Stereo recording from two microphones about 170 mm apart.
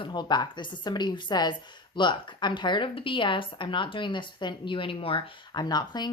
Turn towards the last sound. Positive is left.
turn(degrees=25)  # may be behind; listen again after turning